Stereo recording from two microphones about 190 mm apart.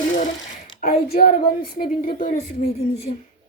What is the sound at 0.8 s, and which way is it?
A woman's voice, 55° left (ahead or behind).